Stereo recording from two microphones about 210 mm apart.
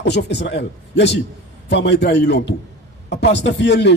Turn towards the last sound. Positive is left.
turn(degrees=55)  # may be behind; listen again after turning